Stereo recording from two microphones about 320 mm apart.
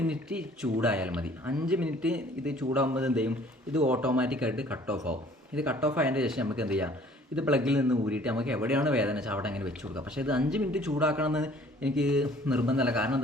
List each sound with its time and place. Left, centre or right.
0.0 s speech: centre